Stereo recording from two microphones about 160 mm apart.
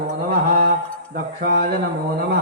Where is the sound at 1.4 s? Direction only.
85° right.